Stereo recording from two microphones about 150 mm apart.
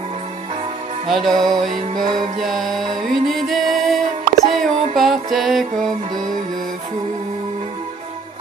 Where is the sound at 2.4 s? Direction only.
Centre (ahead or behind).